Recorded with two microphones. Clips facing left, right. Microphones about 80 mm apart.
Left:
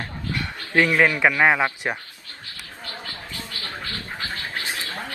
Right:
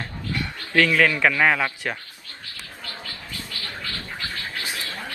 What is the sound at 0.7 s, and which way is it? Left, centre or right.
A man's voice, left.